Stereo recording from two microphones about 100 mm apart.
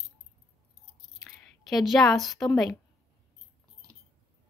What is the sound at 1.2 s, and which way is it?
Speech, centre (ahead or behind).